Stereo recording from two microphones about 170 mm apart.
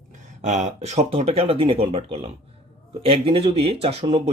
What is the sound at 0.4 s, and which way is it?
Speech, 45° right (ahead or behind).